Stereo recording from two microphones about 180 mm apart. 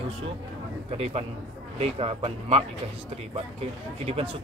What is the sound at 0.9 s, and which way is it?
Speech, 35° right (ahead or behind).